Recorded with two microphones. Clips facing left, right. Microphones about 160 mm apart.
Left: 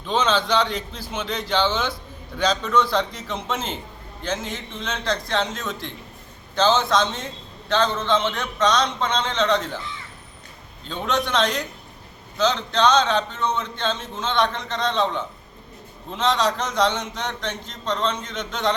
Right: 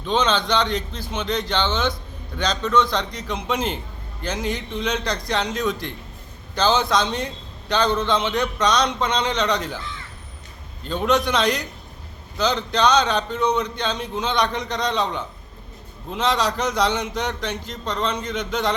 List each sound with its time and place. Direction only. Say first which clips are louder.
0.0 s a man's voice: right 1 dB; 5° left (ahead or behind)
3.2 s speech: right 3 dB; 10° right (ahead or behind)
10.8 s speech: right 4 dB; 10° right (ahead or behind)